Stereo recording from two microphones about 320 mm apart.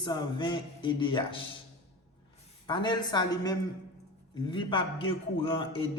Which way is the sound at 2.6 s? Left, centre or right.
Centre.